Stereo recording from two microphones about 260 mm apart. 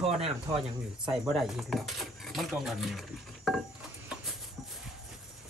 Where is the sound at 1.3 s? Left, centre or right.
Centre.